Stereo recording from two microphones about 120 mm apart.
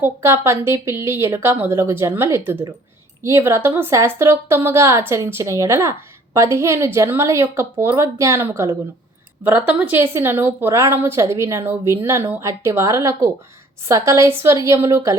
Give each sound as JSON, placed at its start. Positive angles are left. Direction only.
{"t": 0.0, "sound": "a woman's voice", "side_deg": -20}